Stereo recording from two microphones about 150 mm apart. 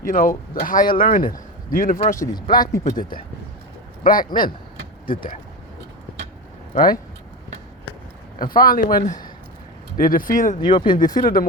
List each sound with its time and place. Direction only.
0.0 s speech: 70° left (ahead or behind)
0.9 s speech: 35° left (ahead or behind)
1.1 s speech: 70° left (ahead or behind)
2.0 s speech: 20° left (ahead or behind)
2.8 s speech: 65° left (ahead or behind)
8.4 s speech: 75° left (ahead or behind)
10.6 s speech: 35° left (ahead or behind)
11.2 s speech: 70° left (ahead or behind)